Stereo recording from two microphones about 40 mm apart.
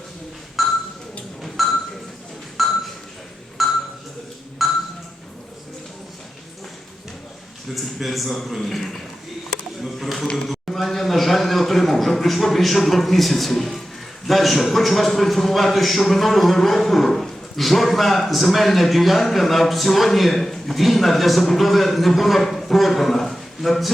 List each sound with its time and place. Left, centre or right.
0.6 s ping: centre
7.8 s a man's voice: centre
9.8 s a sound: centre
14.3 s a man's voice: centre